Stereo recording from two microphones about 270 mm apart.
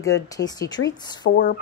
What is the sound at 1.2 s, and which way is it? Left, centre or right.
Speech, left.